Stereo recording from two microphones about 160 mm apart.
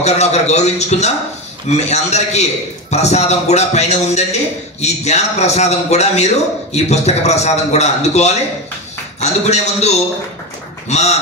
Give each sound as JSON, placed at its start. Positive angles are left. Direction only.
{"t": 0.0, "sound": "a man's voice", "side_deg": 45}